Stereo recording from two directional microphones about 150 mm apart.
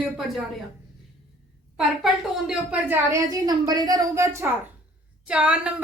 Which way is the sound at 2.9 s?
20° right (ahead or behind).